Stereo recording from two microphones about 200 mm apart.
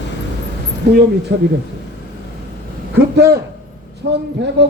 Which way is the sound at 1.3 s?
55° right (ahead or behind).